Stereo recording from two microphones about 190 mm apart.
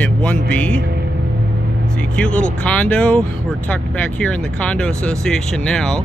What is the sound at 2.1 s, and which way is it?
Speech, 5° left (ahead or behind).